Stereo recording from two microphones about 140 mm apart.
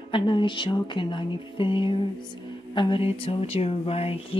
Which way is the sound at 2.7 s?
35° left (ahead or behind).